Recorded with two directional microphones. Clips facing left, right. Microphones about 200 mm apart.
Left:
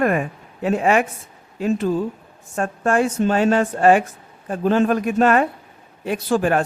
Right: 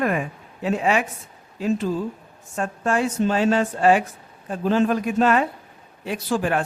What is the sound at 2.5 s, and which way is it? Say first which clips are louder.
A man's voice: left 4 dB; 50° left (ahead or behind).